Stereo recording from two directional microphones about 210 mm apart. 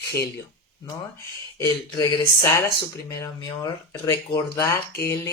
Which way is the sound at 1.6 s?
15° left (ahead or behind).